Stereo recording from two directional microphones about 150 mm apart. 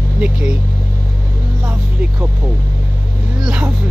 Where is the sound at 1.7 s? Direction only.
10° right (ahead or behind).